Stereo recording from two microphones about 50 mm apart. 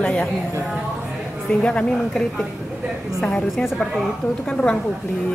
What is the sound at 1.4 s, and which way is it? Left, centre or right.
Speech, centre.